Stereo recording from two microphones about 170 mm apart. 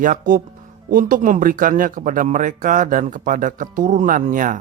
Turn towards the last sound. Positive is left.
turn(degrees=-50)  # may be behind; listen again after turning